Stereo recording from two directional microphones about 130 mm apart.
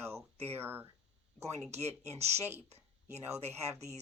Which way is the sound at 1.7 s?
55° right (ahead or behind).